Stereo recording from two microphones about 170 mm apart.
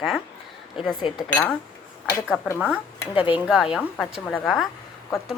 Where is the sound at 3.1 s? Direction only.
30° left (ahead or behind).